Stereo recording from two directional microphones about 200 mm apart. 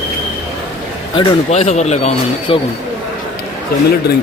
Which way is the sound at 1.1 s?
30° left (ahead or behind).